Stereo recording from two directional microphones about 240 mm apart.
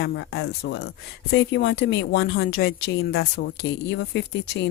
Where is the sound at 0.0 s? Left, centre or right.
Left.